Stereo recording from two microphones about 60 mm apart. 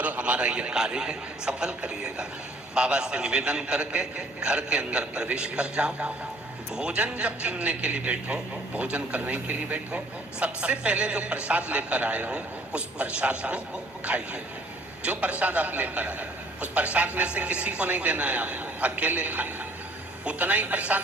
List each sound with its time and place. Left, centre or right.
0.0 s a man's voice: right